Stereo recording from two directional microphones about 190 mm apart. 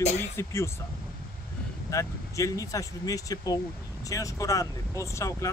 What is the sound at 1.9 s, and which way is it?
Speech, 15° left (ahead or behind).